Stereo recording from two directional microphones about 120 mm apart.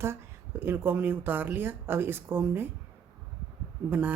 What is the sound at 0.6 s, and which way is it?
Speech, 20° right (ahead or behind).